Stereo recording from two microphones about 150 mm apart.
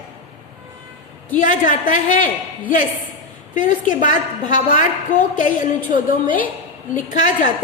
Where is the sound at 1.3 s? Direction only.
60° left (ahead or behind).